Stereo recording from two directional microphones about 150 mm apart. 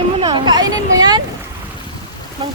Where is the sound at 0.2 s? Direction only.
30° right (ahead or behind).